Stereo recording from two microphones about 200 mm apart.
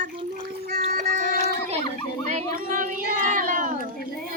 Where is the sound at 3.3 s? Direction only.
40° right (ahead or behind).